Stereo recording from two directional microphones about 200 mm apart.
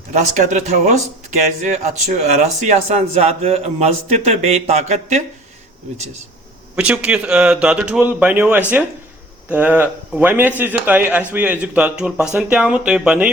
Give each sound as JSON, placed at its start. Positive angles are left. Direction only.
{"t": 0.1, "sound": "speech", "side_deg": -40}
{"t": 6.7, "sound": "a man's voice", "side_deg": -5}